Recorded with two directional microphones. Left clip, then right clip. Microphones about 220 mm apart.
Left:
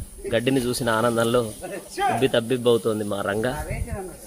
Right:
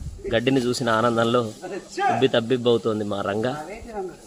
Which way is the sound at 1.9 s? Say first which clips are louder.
Right 1 dB; 10° left (ahead or behind).